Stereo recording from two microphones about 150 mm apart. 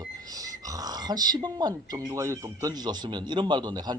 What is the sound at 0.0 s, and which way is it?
A man's voice, 25° right (ahead or behind).